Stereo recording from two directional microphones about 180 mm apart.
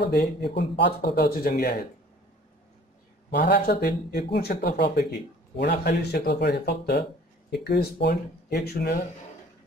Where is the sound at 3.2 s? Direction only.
65° left (ahead or behind).